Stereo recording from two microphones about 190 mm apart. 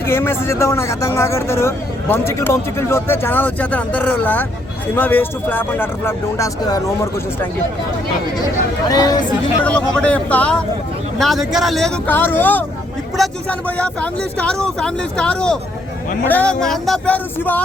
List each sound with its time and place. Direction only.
0.0 s speech: 15° left (ahead or behind)
8.9 s speech: 20° left (ahead or behind)
10.0 s speech: 5° left (ahead or behind)